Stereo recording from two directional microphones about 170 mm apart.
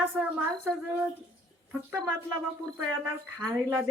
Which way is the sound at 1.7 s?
10° right (ahead or behind).